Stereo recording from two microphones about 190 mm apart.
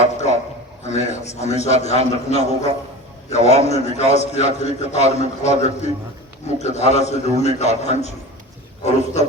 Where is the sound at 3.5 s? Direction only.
35° left (ahead or behind).